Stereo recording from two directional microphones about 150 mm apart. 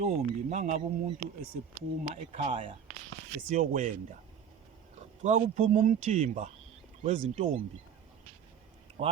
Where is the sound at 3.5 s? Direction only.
60° right (ahead or behind).